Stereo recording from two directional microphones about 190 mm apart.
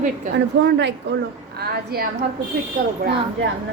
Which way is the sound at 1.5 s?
55° right (ahead or behind).